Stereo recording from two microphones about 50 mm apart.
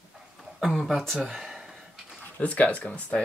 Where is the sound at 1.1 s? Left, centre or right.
Centre.